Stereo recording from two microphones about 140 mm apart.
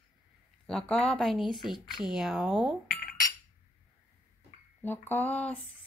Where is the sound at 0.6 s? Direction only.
5° left (ahead or behind).